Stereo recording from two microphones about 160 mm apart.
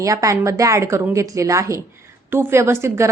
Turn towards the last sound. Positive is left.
turn(degrees=-15)  # may be behind; listen again after turning